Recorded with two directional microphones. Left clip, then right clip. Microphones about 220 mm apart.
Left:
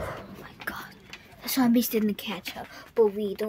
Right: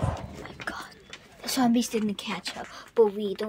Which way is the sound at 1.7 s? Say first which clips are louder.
Left 2 dB; 20° left (ahead or behind).